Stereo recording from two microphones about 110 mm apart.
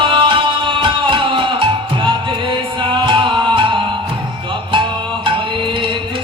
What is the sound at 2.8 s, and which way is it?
Music, 50° right (ahead or behind).